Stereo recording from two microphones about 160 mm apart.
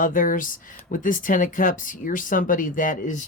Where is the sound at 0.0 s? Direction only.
55° left (ahead or behind).